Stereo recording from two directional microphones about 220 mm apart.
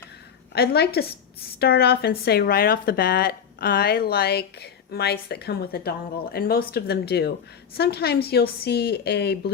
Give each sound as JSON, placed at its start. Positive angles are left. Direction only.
{"t": 0.5, "sound": "speech", "side_deg": 45}